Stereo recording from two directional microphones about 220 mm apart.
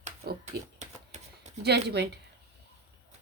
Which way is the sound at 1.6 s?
50° right (ahead or behind).